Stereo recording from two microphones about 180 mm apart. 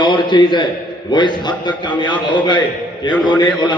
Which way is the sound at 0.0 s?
25° left (ahead or behind).